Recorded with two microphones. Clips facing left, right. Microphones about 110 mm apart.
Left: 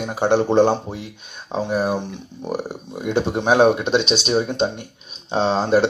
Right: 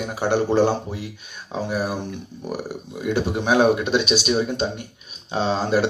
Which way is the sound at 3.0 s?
20° left (ahead or behind).